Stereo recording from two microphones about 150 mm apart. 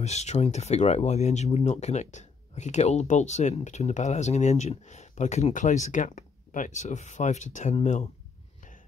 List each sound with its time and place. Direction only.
0.0 s speech: 50° left (ahead or behind)